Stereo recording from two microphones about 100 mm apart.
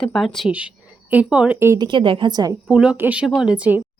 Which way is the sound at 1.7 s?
55° right (ahead or behind).